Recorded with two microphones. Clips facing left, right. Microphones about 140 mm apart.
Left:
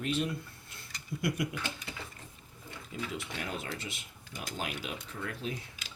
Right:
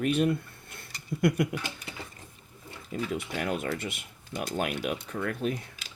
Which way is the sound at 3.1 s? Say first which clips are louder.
Right 9 dB; 55° right (ahead or behind).